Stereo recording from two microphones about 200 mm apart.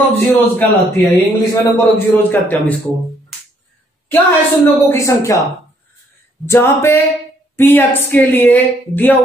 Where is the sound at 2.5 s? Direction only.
5° left (ahead or behind).